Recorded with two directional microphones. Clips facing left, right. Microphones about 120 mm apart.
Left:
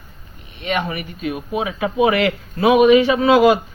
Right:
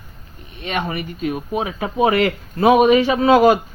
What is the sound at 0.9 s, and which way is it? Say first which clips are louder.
Speech: right 2 dB; 35° right (ahead or behind).